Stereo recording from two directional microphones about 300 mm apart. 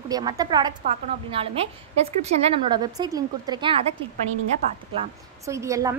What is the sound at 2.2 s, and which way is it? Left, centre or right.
A woman's voice, right.